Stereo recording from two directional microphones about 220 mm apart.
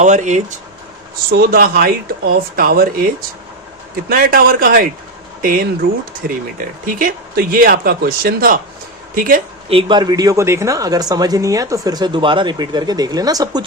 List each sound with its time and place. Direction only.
0.0 s speech: 35° right (ahead or behind)
9.6 s speech: 25° right (ahead or behind)